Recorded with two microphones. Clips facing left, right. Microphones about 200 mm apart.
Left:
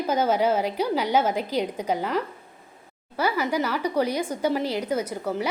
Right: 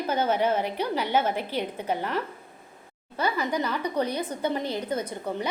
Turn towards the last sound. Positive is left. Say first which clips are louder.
# left 3 dB
turn(degrees=5)  # may be behind; listen again after turning